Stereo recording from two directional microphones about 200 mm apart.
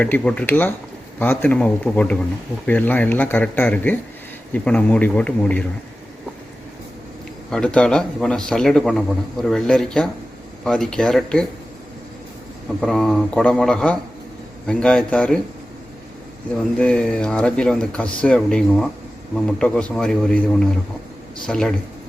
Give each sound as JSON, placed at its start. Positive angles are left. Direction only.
{"t": 0.0, "sound": "speech", "side_deg": 5}
{"t": 7.5, "sound": "speech", "side_deg": 5}
{"t": 12.8, "sound": "speech", "side_deg": 0}
{"t": 16.6, "sound": "speech", "side_deg": 5}